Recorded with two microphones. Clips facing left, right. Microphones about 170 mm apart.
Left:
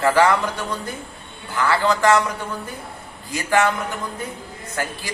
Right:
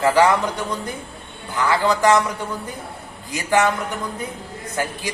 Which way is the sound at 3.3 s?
20° right (ahead or behind).